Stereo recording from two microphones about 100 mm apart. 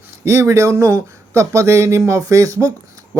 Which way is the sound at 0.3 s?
25° right (ahead or behind).